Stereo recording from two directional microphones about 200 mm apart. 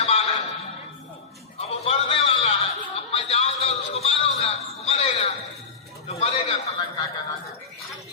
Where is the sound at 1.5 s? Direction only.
30° left (ahead or behind).